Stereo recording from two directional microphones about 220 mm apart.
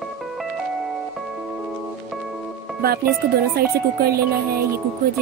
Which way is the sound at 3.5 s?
45° right (ahead or behind).